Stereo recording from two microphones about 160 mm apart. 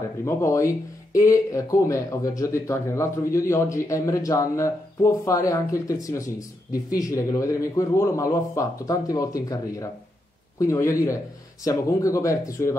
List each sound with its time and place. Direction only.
0.2 s speech: 20° left (ahead or behind)